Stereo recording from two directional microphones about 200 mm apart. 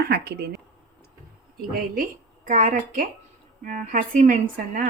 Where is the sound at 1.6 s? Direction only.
45° right (ahead or behind).